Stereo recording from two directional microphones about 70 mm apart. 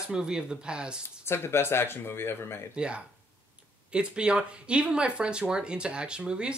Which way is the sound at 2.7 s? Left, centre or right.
Centre.